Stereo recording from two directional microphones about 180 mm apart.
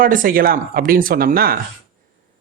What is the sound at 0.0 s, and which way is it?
Speech, 50° right (ahead or behind).